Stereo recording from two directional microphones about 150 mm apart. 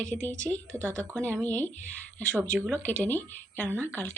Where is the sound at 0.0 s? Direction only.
10° left (ahead or behind).